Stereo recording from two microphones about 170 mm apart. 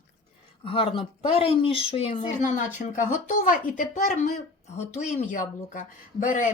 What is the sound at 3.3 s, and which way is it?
Speech, 50° left (ahead or behind).